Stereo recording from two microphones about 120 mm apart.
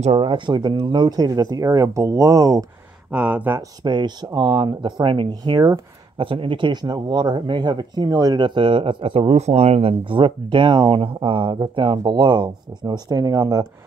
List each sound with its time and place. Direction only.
0.0 s speech: 55° right (ahead or behind); by 2.6 s 30° right (ahead or behind)
3.1 s speech: 10° right (ahead or behind)
3.8 s speech: 40° right (ahead or behind)
6.1 s speech: 45° right (ahead or behind); by 13.7 s 30° right (ahead or behind)